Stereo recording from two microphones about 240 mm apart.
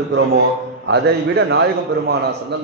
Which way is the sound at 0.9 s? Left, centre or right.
Right.